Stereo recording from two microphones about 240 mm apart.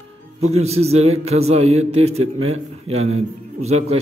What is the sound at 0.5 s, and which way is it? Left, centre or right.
A man's voice, right.